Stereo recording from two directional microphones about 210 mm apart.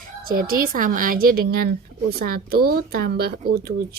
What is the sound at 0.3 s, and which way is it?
Speech, 45° right (ahead or behind).